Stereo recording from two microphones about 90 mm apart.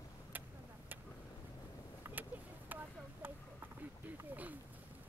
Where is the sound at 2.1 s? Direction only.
25° right (ahead or behind).